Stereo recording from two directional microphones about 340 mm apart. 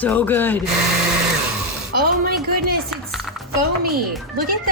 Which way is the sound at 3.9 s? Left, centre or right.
Right.